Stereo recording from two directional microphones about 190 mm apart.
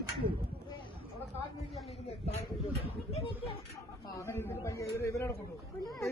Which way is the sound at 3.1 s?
35° left (ahead or behind).